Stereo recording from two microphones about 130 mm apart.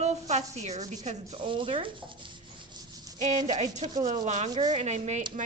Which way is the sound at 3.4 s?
55° right (ahead or behind).